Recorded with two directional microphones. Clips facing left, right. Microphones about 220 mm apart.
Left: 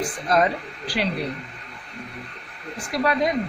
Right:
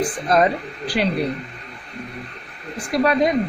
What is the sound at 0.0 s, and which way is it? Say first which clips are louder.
Speech: right 3 dB; 35° right (ahead or behind).